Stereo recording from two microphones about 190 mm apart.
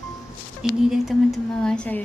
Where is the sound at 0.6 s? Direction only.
Centre (ahead or behind).